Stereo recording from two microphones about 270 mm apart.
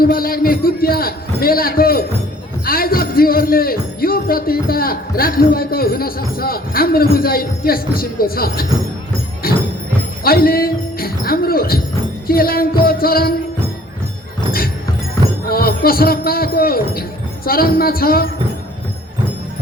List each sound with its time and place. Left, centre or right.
0.0 s speech: left
9.4 s music: left
10.2 s a woman's voice: left
15.4 s speech: left